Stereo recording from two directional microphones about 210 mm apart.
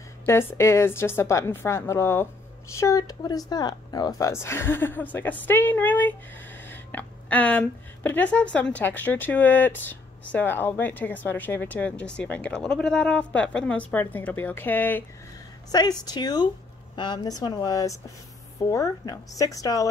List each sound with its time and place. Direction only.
0.2 s speech: 10° left (ahead or behind)